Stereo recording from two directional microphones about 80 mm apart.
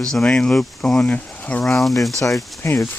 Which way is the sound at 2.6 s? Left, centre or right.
Left.